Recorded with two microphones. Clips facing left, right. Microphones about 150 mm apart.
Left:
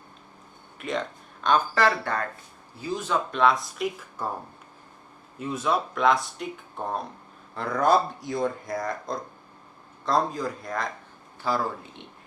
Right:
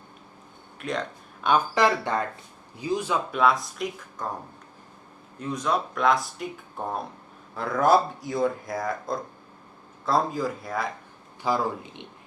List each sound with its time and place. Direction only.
0.8 s speech: centre (ahead or behind)
1.5 s speech: 15° right (ahead or behind)
5.4 s speech: 5° left (ahead or behind)
7.5 s speech: centre (ahead or behind)
11.4 s speech: 15° right (ahead or behind)